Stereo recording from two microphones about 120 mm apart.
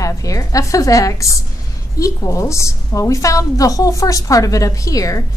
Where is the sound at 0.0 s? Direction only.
30° left (ahead or behind).